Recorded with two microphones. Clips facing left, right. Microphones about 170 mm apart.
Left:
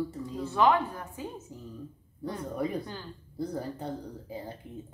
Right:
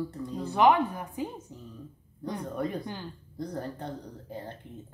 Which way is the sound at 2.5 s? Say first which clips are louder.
Left 2 dB; centre (ahead or behind).